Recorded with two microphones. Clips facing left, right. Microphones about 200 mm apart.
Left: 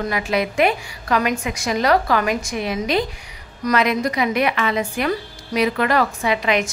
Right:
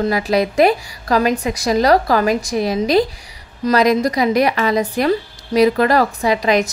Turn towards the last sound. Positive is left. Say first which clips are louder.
# right 4 dB
turn(degrees=-40)  # may be behind; listen again after turning